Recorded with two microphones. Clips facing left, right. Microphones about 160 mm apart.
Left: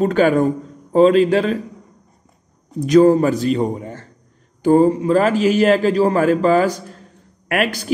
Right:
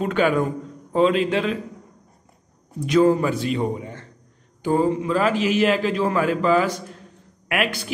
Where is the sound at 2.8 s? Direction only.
35° left (ahead or behind).